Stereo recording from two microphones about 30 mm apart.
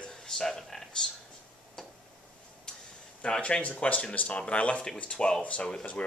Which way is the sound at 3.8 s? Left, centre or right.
Left.